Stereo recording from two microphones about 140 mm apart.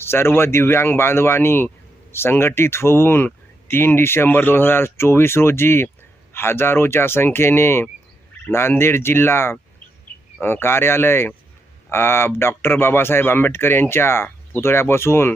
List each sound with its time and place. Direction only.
0.0 s speech: 15° left (ahead or behind)